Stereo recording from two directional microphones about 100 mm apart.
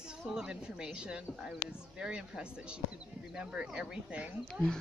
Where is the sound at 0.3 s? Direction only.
5° right (ahead or behind).